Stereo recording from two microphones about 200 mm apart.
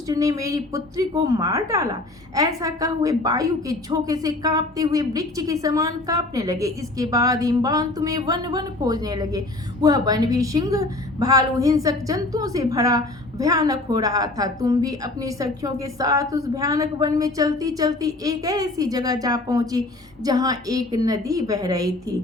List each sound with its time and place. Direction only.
0.1 s a woman's voice: 15° right (ahead or behind)